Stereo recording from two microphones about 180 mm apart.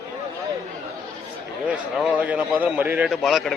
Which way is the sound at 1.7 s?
5° right (ahead or behind).